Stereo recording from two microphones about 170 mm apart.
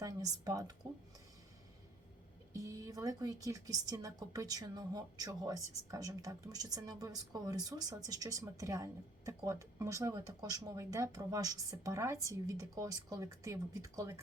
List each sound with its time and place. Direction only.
0.0 s speech: 20° right (ahead or behind)
2.6 s speech: 20° right (ahead or behind)